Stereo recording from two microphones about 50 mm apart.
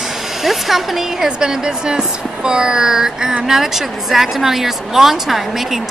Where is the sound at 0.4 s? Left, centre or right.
Centre.